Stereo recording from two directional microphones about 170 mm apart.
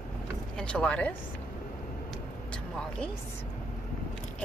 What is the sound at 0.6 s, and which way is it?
Speech, 5° left (ahead or behind).